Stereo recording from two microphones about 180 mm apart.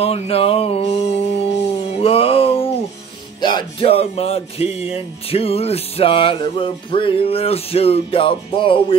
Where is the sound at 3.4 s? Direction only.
30° left (ahead or behind).